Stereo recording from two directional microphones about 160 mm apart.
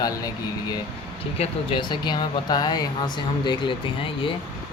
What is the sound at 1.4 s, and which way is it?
Speech, 30° left (ahead or behind).